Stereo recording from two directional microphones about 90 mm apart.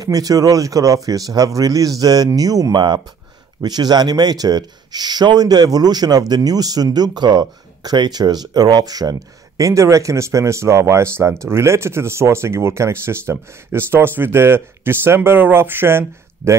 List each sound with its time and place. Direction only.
0.0 s speech: 40° right (ahead or behind)
9.6 s speech: 35° right (ahead or behind)